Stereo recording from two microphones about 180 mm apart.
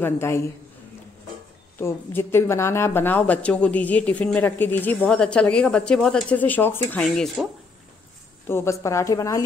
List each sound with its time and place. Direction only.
0.0 s a woman's voice: 15° left (ahead or behind)
1.8 s a woman's voice: 15° left (ahead or behind)
8.5 s a woman's voice: 15° left (ahead or behind)